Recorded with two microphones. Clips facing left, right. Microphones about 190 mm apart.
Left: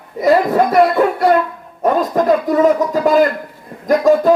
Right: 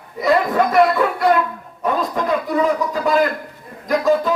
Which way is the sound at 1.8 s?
45° left (ahead or behind).